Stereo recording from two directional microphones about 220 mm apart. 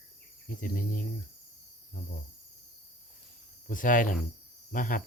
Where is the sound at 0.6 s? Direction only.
40° left (ahead or behind).